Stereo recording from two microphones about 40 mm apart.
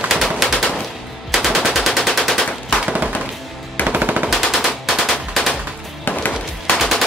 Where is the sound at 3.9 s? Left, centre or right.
Right.